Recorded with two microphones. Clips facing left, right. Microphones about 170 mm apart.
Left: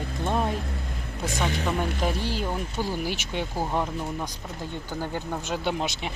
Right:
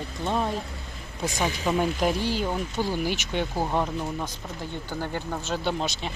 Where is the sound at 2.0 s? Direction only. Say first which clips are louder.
Right 3 dB; 5° right (ahead or behind).